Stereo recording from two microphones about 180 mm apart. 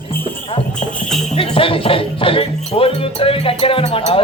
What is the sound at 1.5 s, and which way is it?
Speech, 30° left (ahead or behind).